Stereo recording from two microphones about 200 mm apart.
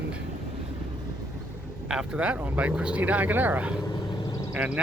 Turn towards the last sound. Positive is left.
turn(degrees=-5)  # may be behind; listen again after turning